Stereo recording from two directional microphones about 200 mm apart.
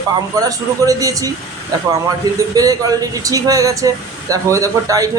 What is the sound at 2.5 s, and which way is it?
Speech, 20° right (ahead or behind).